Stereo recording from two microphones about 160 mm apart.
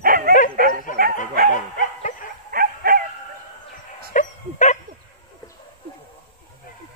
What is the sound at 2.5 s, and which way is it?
Bow-wow, 65° right (ahead or behind).